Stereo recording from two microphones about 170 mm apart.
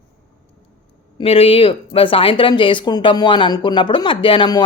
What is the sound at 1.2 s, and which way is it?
A woman's voice, 35° left (ahead or behind).